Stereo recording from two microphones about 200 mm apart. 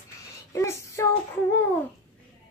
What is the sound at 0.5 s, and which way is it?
Child singing, 15° left (ahead or behind).